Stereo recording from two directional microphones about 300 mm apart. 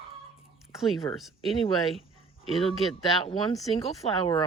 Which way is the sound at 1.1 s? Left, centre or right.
Centre.